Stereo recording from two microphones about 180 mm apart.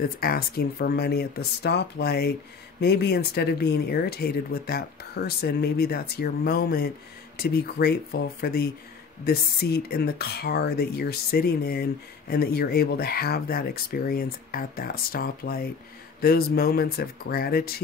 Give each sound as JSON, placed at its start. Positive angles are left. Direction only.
{"t": 0.2, "sound": "speech", "side_deg": 55}